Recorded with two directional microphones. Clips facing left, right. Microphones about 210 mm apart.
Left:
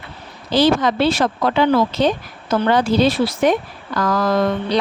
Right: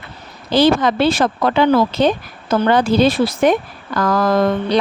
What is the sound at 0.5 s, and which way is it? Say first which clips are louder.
Speech: right 2 dB; 55° right (ahead or behind).